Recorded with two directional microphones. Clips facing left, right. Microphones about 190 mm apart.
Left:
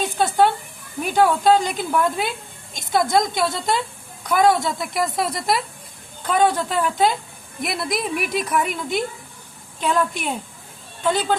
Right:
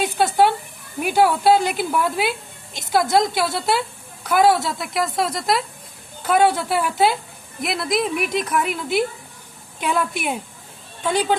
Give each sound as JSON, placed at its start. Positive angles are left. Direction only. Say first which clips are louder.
{"t": 0.0, "sound": "a woman's voice", "louder": "right 1 dB", "side_deg": -10}